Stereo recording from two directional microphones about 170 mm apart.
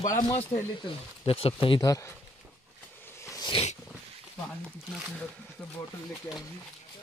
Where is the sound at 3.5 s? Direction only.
35° left (ahead or behind).